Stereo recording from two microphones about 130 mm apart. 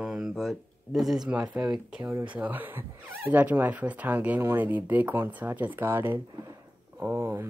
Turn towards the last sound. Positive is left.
turn(degrees=-20)  # may be behind; listen again after turning